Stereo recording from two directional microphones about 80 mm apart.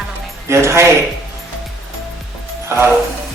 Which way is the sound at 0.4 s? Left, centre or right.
Right.